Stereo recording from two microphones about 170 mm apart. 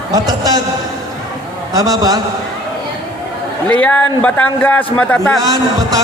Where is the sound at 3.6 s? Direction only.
10° left (ahead or behind).